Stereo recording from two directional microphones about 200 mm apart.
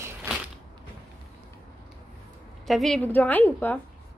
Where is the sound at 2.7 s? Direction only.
Centre (ahead or behind).